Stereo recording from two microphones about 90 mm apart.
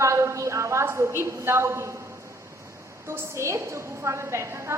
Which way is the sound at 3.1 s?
30° right (ahead or behind).